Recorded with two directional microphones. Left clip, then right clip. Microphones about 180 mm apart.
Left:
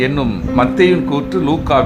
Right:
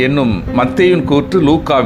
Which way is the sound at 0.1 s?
15° right (ahead or behind).